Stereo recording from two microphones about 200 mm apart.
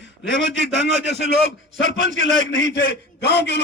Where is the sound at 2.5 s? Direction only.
65° left (ahead or behind).